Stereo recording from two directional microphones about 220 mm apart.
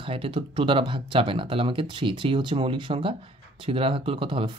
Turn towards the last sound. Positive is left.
turn(degrees=-25)  # may be behind; listen again after turning